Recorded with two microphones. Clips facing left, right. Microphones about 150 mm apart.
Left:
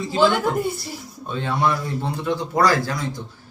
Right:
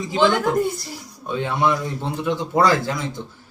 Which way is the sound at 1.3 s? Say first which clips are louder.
Right 1 dB; 15° right (ahead or behind).